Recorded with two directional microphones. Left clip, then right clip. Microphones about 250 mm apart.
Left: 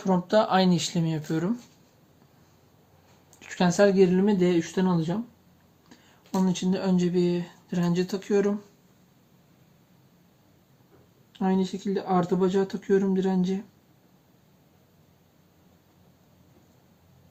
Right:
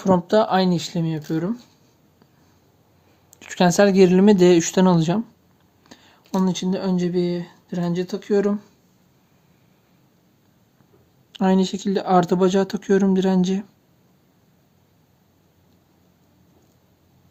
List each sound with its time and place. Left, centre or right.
0.0 s speech: right
3.3 s speech: right
5.9 s speech: right
11.3 s speech: right